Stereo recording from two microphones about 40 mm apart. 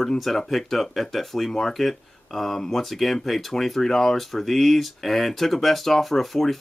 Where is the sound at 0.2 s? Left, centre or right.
Centre.